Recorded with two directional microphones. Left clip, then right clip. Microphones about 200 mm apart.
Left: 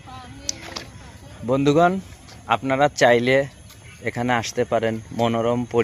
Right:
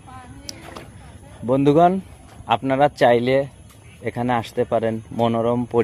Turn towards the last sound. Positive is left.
turn(degrees=-20)  # may be behind; listen again after turning